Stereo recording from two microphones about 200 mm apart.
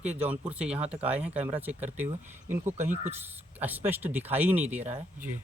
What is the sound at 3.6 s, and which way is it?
Speech, 10° right (ahead or behind).